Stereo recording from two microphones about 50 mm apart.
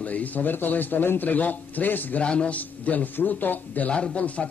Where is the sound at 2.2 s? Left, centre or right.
Left.